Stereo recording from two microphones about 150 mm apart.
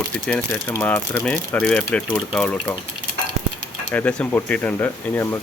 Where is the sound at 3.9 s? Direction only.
10° left (ahead or behind).